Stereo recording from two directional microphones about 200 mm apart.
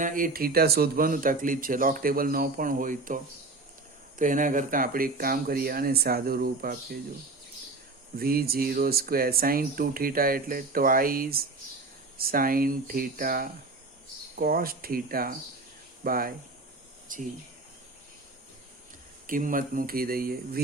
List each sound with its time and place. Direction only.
0.0 s speech: 45° right (ahead or behind)
4.2 s speech: 40° right (ahead or behind)
8.1 s speech: 50° right (ahead or behind)
19.3 s speech: 45° right (ahead or behind)